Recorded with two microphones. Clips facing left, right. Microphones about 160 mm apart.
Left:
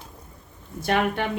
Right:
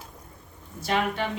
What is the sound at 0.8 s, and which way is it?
Speech, 55° left (ahead or behind).